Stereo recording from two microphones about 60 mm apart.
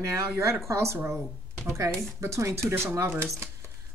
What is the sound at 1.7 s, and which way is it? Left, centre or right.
Speech, right.